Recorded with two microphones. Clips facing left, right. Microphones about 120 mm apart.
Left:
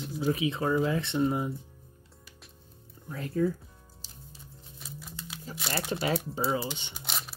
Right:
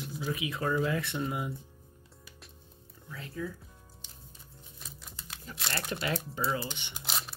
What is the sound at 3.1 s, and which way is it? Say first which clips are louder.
Speech: left 10 dB; 45° left (ahead or behind).